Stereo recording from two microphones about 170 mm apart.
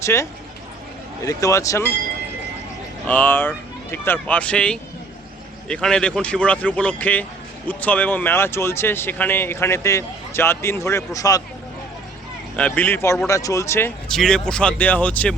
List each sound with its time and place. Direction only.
0.0 s speech: 15° left (ahead or behind)
3.1 s speech: 10° left (ahead or behind)
12.5 s speech: 5° left (ahead or behind)
14.1 s speech: 5° left (ahead or behind)